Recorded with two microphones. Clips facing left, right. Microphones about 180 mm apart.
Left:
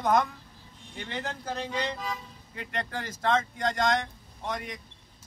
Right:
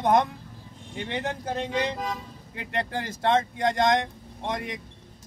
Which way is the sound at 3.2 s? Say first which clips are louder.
Right 4 dB; 20° right (ahead or behind).